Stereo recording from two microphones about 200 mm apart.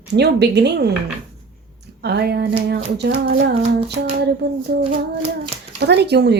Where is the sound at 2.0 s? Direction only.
55° right (ahead or behind).